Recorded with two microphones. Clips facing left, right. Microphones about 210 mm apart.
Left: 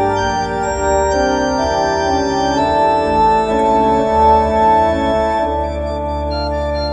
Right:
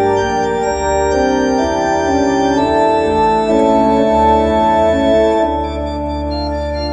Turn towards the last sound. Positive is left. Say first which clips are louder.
# right 5 dB
turn(degrees=-30)  # may be behind; listen again after turning